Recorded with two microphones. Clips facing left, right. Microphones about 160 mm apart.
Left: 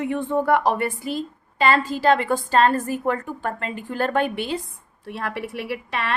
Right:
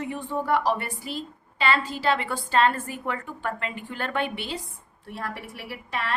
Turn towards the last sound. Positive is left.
turn(degrees=70)  # may be behind; listen again after turning